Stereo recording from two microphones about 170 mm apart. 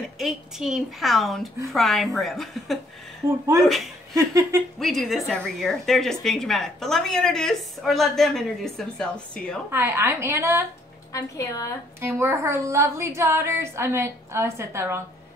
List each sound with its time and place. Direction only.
0.2 s a woman's voice: centre (ahead or behind)
4.1 s a sound: 20° right (ahead or behind)
4.7 s a woman's voice: centre (ahead or behind)
9.7 s a woman's voice: 15° right (ahead or behind)
11.1 s a woman's voice: 20° left (ahead or behind)
12.0 s a woman's voice: 15° right (ahead or behind)